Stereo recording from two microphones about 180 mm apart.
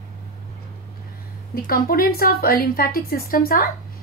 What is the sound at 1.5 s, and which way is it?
Speech, 55° left (ahead or behind).